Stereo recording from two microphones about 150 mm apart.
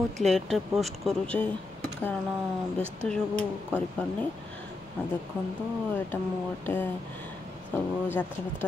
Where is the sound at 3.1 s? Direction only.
5° left (ahead or behind).